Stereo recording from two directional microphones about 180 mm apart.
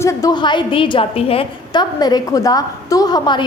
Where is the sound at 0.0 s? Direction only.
15° left (ahead or behind).